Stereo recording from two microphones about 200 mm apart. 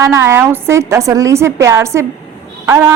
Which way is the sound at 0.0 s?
15° right (ahead or behind).